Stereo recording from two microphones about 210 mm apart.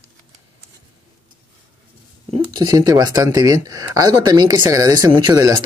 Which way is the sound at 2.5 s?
20° right (ahead or behind).